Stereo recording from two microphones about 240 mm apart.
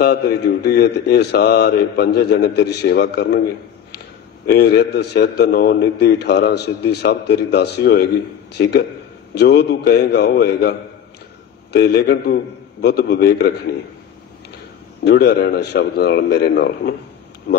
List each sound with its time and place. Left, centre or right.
0.0 s a man's voice: left
4.5 s a man's voice: left
15.0 s a man's voice: left